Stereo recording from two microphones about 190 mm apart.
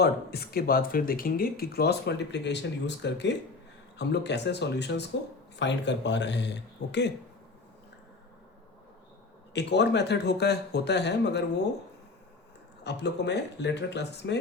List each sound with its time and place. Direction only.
0.0 s speech: 55° left (ahead or behind)
9.5 s speech: 65° left (ahead or behind)
12.8 s speech: 65° left (ahead or behind)